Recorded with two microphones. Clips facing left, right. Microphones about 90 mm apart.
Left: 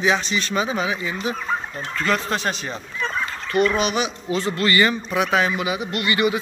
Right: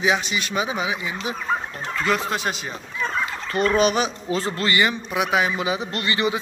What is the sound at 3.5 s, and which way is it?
Speech, 40° right (ahead or behind).